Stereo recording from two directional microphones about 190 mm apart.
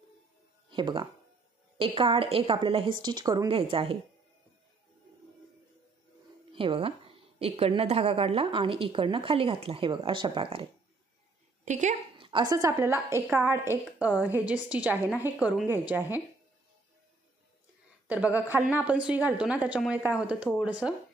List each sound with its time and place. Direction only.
0.7 s music: 25° right (ahead or behind)
1.8 s a woman's voice: 30° right (ahead or behind)
6.5 s a woman's voice: 30° right (ahead or behind)
11.6 s speech: 40° right (ahead or behind)
12.3 s a woman's voice: 20° right (ahead or behind)
18.0 s a woman's voice: 10° right (ahead or behind)